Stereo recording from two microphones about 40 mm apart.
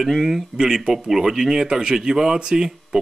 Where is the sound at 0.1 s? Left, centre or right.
Centre.